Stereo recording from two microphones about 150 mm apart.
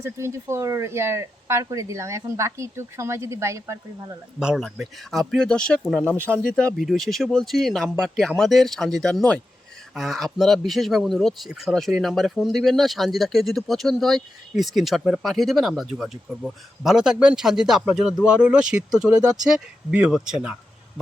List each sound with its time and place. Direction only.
0.0 s speech: 20° right (ahead or behind)
4.4 s speech: 5° right (ahead or behind)